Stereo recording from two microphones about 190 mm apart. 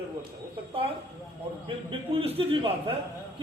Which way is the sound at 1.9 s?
30° right (ahead or behind).